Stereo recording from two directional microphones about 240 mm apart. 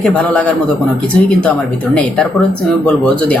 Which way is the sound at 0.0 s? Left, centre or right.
Centre.